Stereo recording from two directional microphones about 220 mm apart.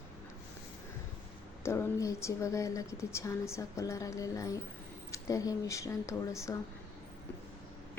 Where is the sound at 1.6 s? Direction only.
10° left (ahead or behind).